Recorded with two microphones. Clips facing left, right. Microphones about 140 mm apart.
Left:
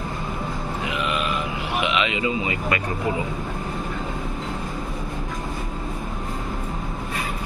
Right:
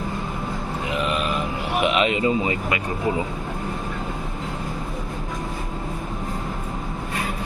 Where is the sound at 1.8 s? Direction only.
45° right (ahead or behind).